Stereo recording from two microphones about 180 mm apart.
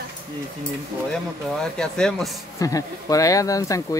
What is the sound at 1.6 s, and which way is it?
Speech, 5° left (ahead or behind).